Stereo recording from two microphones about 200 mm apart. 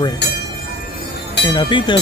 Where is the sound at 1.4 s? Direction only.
20° left (ahead or behind).